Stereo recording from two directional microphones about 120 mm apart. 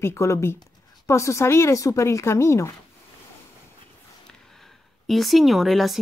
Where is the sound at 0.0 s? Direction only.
20° left (ahead or behind).